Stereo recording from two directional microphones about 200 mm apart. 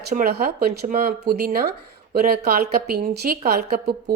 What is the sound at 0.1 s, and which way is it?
A woman's voice, 45° right (ahead or behind).